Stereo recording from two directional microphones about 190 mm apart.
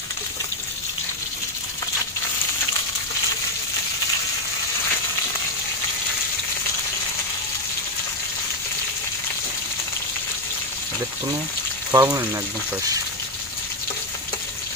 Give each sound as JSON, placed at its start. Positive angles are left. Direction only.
{"t": 11.9, "sound": "speech", "side_deg": -20}